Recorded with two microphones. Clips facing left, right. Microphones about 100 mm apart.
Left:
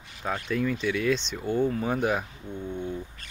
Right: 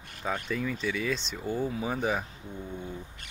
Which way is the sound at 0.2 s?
Centre (ahead or behind).